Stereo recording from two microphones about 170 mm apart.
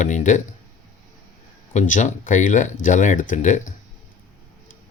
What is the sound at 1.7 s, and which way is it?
Speech, 45° left (ahead or behind).